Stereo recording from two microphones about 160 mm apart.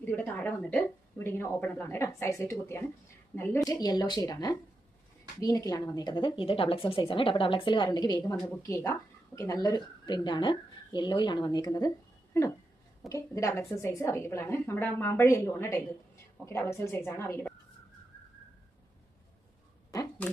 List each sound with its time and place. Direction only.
0.0 s a woman's voice: 10° left (ahead or behind)
13.1 s a woman's voice: 20° left (ahead or behind)
20.2 s speech: 10° left (ahead or behind)